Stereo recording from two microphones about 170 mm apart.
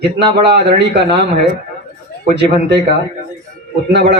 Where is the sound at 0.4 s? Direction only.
80° right.